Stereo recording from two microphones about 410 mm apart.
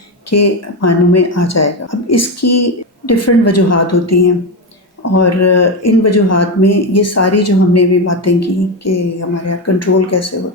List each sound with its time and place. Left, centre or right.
0.3 s speech: left